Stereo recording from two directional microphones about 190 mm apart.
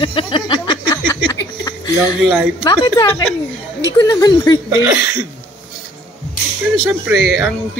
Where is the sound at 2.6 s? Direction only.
20° left (ahead or behind).